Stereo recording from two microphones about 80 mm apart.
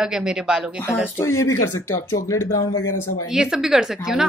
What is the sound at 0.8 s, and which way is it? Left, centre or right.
Speech, left.